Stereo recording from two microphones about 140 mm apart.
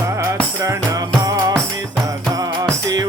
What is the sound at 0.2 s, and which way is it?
Music, 20° right (ahead or behind).